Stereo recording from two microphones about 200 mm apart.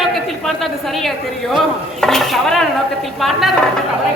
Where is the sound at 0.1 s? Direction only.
Centre (ahead or behind).